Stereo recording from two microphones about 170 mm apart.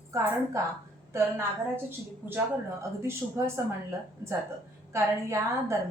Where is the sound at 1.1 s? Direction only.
15° right (ahead or behind).